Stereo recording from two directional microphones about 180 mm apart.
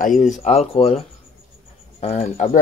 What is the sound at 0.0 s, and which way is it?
Speech, 45° left (ahead or behind).